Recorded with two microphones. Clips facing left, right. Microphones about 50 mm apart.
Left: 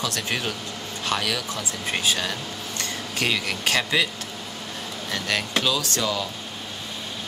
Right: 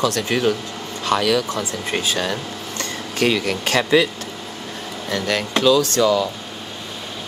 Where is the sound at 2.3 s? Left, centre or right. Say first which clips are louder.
Right 5 dB; right.